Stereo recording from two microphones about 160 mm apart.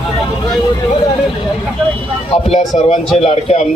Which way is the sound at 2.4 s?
40° left (ahead or behind).